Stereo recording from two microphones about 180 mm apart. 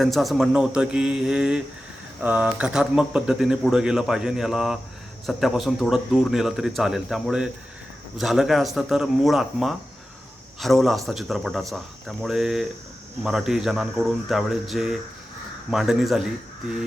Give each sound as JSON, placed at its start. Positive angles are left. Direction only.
{"t": 0.0, "sound": "speech", "side_deg": 0}